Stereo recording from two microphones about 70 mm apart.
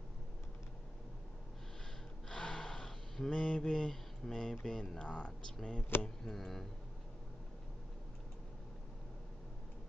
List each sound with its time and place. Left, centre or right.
2.2 s gasp: centre
4.6 s speech: centre